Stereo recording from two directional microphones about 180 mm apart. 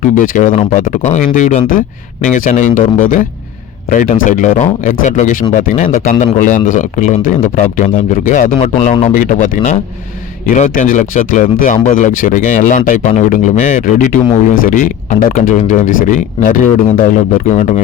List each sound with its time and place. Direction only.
0.0 s speech: 45° left (ahead or behind)